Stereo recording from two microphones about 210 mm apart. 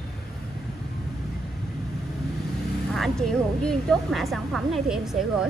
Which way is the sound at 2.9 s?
Centre (ahead or behind).